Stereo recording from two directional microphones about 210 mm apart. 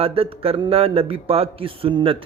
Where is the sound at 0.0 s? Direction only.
25° right (ahead or behind).